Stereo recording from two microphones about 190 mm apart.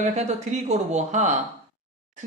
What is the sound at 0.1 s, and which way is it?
Speech, 40° right (ahead or behind).